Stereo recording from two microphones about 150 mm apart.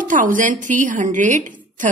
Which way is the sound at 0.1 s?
60° right (ahead or behind).